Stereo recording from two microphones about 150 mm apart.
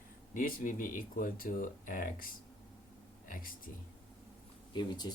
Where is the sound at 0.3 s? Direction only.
65° left (ahead or behind).